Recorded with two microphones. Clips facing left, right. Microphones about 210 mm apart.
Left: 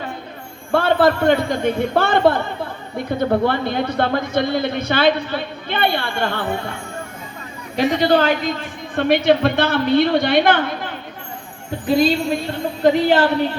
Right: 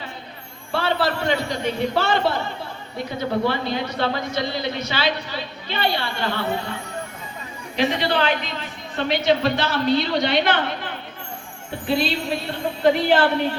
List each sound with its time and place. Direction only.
0.7 s a man's voice: 50° left (ahead or behind)
7.8 s a man's voice: 40° left (ahead or behind)
9.0 s a woman's voice: 55° left (ahead or behind)
11.9 s a woman's voice: 40° left (ahead or behind)